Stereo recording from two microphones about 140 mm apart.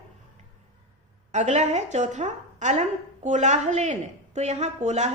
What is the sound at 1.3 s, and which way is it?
A woman's voice, 55° right (ahead or behind).